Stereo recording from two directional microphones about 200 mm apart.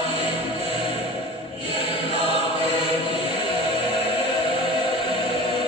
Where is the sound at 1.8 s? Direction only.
25° left (ahead or behind).